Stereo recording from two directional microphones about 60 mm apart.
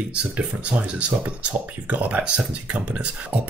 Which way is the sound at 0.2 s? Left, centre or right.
Right.